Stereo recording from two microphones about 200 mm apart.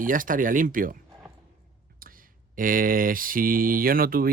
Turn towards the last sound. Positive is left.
turn(degrees=-45)  # may be behind; listen again after turning